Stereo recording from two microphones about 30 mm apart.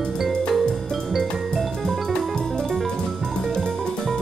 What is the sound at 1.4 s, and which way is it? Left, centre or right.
Music, centre.